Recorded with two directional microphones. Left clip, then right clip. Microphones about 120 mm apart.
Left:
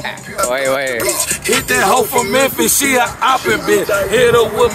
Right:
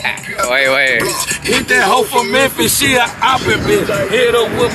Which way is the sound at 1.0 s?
40° left (ahead or behind).